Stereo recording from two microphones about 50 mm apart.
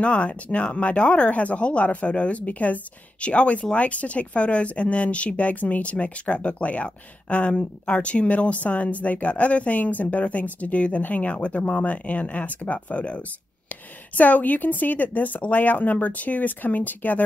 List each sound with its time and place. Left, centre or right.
0.0 s speech: left